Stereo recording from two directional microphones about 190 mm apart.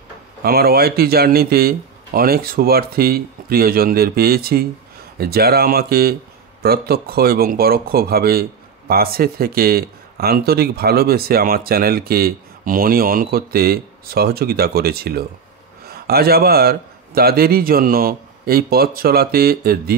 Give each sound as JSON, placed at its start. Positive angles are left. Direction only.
{"t": 0.4, "sound": "speech", "side_deg": -55}